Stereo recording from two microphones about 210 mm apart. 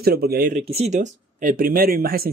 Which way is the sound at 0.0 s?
50° right (ahead or behind).